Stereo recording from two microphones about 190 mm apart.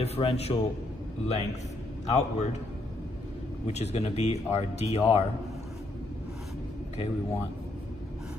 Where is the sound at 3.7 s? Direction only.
35° left (ahead or behind).